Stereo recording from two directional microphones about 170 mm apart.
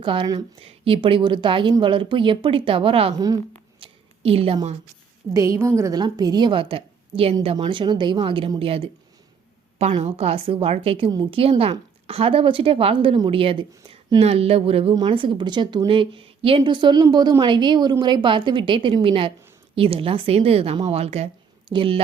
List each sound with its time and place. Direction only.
0.0 s a woman's voice: 30° right (ahead or behind)
3.8 s a sound: 35° right (ahead or behind)
5.3 s a woman's voice: 15° right (ahead or behind); by 8.9 s 35° right (ahead or behind)
10.0 s a woman's voice: 35° right (ahead or behind)